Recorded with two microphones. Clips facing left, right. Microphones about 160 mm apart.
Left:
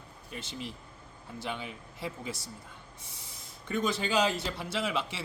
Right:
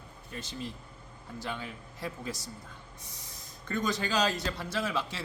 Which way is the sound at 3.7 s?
20° left (ahead or behind).